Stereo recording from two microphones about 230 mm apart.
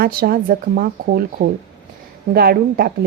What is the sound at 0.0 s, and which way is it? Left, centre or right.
A woman's voice, right.